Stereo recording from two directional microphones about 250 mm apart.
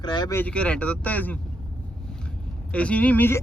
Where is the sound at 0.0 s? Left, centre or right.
Centre.